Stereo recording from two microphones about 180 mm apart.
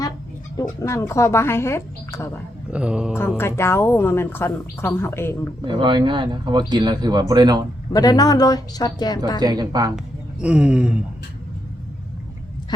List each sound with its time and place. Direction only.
0.8 s a woman's voice: 15° left (ahead or behind)
2.7 s a sound: 5° right (ahead or behind)
3.2 s a woman's voice: 15° left (ahead or behind)
5.6 s speech: 25° right (ahead or behind)
7.9 s a woman's voice: 20° left (ahead or behind)
9.4 s speech: 20° right (ahead or behind)
10.4 s a sound: 5° right (ahead or behind)